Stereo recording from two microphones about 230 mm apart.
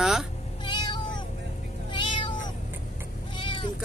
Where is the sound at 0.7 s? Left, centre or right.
Centre.